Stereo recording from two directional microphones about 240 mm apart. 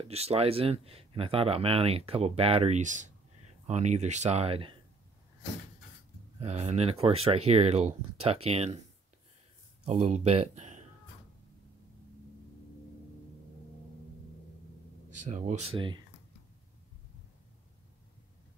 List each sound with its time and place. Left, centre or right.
0.0 s speech: right
6.4 s speech: right
9.8 s speech: right
15.2 s speech: right